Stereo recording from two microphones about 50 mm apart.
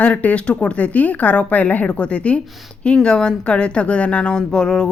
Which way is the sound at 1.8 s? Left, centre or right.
Left.